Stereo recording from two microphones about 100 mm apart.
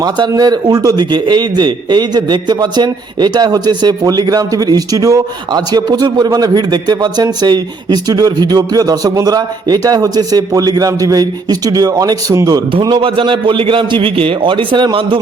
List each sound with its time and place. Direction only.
0.0 s speech: 40° right (ahead or behind)
12.8 s a man's voice: 55° right (ahead or behind)